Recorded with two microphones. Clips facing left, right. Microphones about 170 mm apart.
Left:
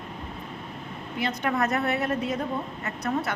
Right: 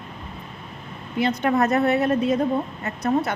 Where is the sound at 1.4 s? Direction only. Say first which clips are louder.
Right 6 dB; 25° right (ahead or behind).